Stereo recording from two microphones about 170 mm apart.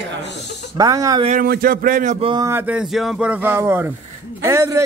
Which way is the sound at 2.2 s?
30° right (ahead or behind).